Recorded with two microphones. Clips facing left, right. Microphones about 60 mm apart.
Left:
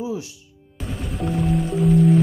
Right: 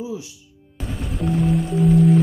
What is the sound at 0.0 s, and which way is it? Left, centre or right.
Music, left.